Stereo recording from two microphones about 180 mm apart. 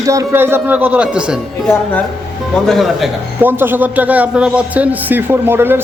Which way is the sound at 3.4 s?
10° right (ahead or behind).